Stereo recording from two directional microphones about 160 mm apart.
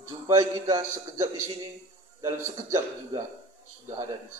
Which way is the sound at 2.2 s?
20° right (ahead or behind).